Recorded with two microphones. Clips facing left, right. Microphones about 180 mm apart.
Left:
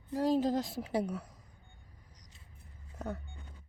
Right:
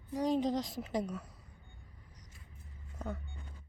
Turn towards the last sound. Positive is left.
turn(degrees=0)  # may be behind; listen again after turning